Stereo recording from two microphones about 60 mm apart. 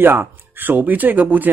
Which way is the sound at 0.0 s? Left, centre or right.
Right.